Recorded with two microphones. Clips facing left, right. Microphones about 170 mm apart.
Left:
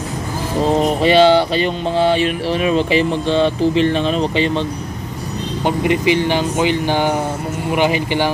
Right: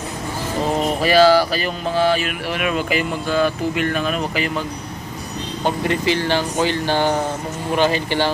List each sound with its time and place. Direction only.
1.0 s mantra: 25° left (ahead or behind)
5.7 s speech: 15° left (ahead or behind)